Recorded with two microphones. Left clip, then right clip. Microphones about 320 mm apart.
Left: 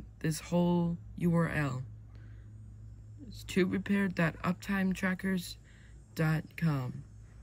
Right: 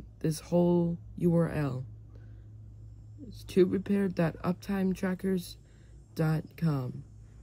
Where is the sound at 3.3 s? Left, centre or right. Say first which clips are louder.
Right 6 dB; centre.